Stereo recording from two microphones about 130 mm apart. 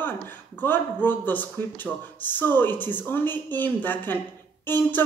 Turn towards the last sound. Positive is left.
turn(degrees=15)  # may be behind; listen again after turning